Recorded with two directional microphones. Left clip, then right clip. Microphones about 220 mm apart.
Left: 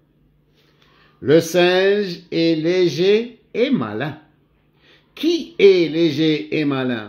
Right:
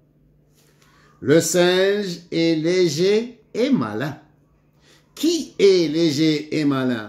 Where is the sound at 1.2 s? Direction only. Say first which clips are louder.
Left 2 dB; 15° left (ahead or behind).